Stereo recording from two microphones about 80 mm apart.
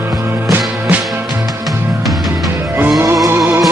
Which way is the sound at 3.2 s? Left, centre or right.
Right.